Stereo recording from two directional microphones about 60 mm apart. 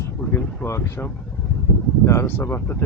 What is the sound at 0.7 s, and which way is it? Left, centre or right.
Speech, left.